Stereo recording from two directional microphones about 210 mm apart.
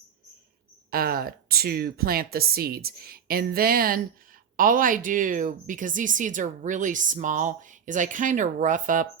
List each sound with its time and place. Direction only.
0.9 s a woman's voice: 45° right (ahead or behind)